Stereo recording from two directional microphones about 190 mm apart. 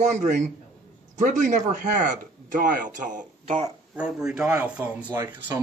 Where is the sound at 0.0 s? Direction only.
40° right (ahead or behind).